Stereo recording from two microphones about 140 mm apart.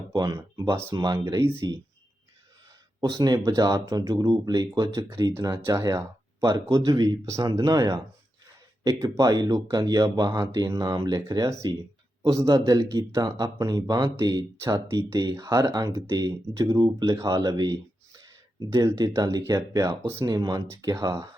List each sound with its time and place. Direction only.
0.1 s speech: 30° right (ahead or behind)
3.0 s speech: 30° right (ahead or behind)